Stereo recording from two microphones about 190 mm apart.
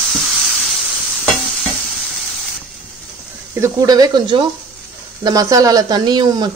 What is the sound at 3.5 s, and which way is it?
Speech, 15° right (ahead or behind).